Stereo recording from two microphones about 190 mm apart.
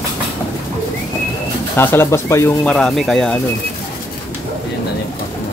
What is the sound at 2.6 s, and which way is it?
Speech, 5° left (ahead or behind).